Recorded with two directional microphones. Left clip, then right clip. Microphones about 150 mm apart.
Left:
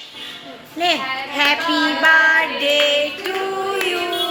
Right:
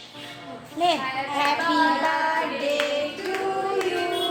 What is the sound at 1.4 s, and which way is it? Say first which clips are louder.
Speech: left 5 dB; 60° left (ahead or behind).